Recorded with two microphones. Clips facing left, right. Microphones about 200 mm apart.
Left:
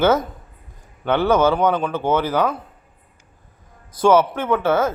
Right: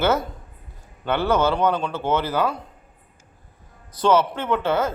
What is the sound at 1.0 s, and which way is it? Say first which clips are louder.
Speech: left 4 dB; 15° left (ahead or behind).